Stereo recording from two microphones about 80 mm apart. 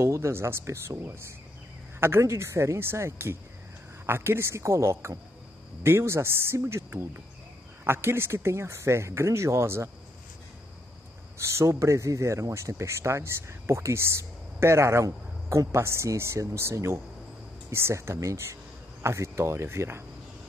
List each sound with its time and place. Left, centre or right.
0.0 s speech: right
11.3 s speech: right